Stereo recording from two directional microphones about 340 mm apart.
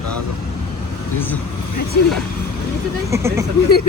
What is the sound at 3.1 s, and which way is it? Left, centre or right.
Speech, centre.